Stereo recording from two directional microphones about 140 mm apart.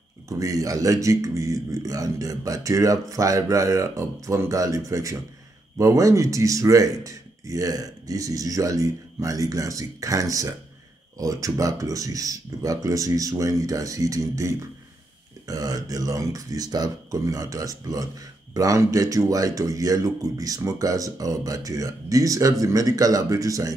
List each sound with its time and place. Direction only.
0.3 s speech: 25° right (ahead or behind)